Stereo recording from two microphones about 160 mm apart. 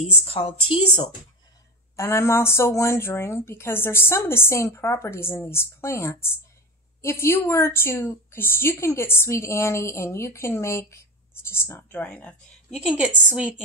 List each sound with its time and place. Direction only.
0.0 s speech: 40° left (ahead or behind)
2.0 s a woman's voice: 15° left (ahead or behind)
12.7 s a woman's voice: 5° right (ahead or behind)